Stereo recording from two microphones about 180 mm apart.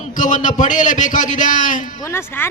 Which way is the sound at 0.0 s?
45° left (ahead or behind).